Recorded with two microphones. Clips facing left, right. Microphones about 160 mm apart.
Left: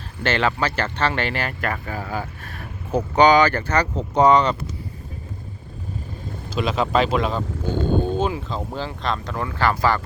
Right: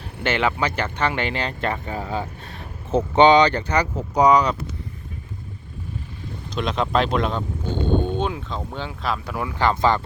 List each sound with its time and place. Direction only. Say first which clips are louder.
0.2 s speech: left 1 dB; 15° right (ahead or behind)
4.1 s speech: left 1 dB; centre (ahead or behind)
6.5 s speech: left 1 dB; 5° left (ahead or behind); by 10.0 s 20° right (ahead or behind)